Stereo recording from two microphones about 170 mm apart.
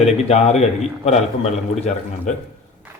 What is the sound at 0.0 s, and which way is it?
A man's voice, 40° left (ahead or behind).